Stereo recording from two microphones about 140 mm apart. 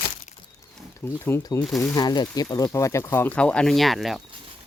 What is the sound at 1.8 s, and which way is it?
Speech, 30° left (ahead or behind).